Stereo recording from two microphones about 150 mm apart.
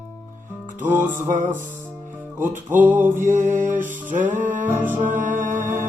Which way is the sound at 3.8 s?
15° right (ahead or behind).